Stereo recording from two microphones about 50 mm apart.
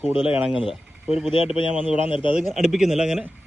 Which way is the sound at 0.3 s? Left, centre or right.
Centre.